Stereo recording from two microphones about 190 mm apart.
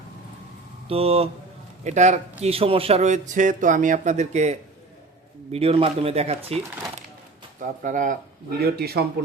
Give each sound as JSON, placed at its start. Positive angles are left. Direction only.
{"t": 0.9, "sound": "speech", "side_deg": -30}
{"t": 7.6, "sound": "speech", "side_deg": -40}
{"t": 8.7, "sound": "speech", "side_deg": -55}